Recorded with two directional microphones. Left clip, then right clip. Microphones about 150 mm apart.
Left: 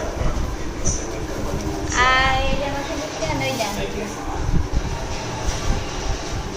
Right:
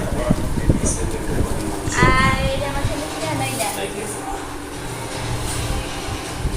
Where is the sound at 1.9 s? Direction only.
60° left (ahead or behind).